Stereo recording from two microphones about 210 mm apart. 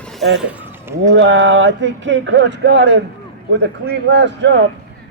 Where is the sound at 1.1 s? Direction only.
60° right (ahead or behind).